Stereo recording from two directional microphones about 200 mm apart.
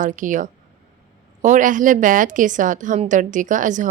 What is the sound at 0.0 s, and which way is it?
A woman's voice, 40° right (ahead or behind).